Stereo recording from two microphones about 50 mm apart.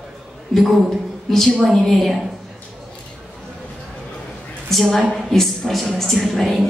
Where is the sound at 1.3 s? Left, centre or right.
Centre.